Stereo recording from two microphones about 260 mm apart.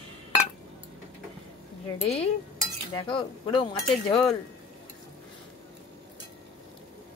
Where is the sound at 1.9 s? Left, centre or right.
Left.